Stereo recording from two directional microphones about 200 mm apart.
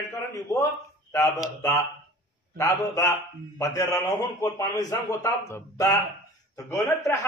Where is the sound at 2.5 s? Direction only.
15° left (ahead or behind).